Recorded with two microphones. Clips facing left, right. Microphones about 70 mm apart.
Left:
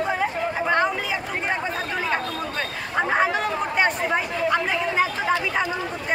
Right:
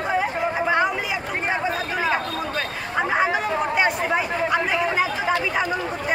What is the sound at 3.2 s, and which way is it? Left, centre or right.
Chatter, centre.